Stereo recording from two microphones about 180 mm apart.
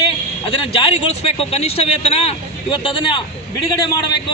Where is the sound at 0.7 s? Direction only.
30° left (ahead or behind).